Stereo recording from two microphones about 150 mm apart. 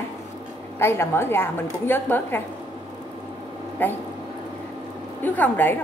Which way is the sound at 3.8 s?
10° left (ahead or behind).